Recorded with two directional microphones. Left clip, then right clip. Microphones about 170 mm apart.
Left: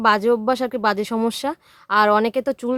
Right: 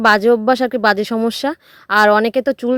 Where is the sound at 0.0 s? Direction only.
25° right (ahead or behind).